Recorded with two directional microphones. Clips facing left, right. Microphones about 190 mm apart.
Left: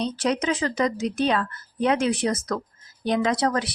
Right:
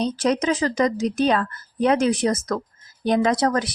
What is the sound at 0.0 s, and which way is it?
Speech, 40° right (ahead or behind).